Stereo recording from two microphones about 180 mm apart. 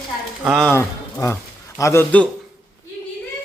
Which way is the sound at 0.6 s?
15° left (ahead or behind).